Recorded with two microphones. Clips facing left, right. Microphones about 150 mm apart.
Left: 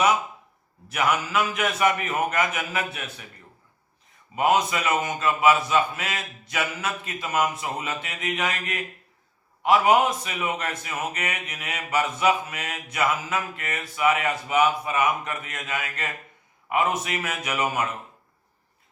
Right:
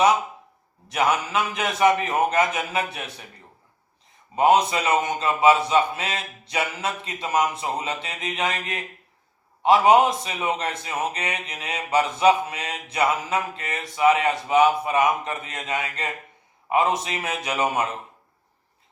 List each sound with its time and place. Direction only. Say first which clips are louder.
0.9 s a man's voice: right 2 dB; 30° right (ahead or behind)
4.4 s a man's voice: right 4 dB; 30° right (ahead or behind)